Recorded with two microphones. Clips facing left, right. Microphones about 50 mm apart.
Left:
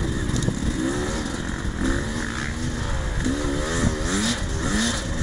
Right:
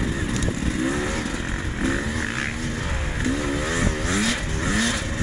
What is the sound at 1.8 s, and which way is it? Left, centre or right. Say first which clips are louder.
Motorcycle: right 1 dB; right.